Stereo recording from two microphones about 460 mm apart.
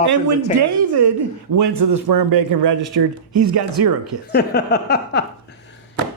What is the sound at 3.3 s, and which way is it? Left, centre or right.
Speech, right.